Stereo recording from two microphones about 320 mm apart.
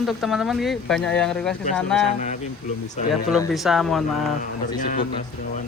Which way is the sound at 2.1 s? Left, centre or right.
Left.